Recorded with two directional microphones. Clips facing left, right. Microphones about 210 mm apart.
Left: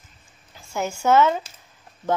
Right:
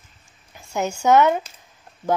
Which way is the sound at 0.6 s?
15° right (ahead or behind).